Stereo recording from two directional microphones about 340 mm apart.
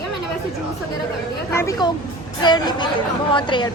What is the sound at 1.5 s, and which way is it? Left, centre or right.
Speech, centre.